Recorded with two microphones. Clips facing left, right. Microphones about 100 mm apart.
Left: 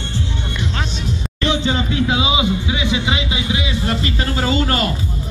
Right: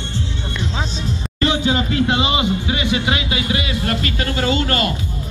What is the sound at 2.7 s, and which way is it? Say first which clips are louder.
Speech: even; 55° right (ahead or behind).